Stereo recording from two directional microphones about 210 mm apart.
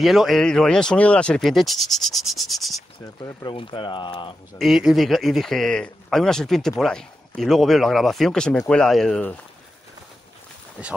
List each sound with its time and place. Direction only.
0.0 s speech: centre (ahead or behind)
3.2 s speech: 20° left (ahead or behind)
4.6 s speech: centre (ahead or behind)